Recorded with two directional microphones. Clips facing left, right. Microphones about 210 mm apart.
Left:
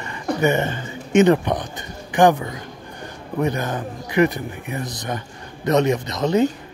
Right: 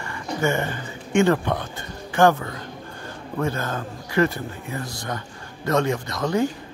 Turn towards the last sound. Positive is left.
turn(degrees=20)  # may be behind; listen again after turning